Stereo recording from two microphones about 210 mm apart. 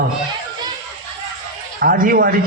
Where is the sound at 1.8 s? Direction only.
45° right (ahead or behind).